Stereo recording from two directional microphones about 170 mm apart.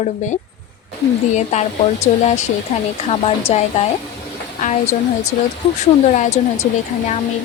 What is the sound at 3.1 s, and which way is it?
Speech, 35° left (ahead or behind).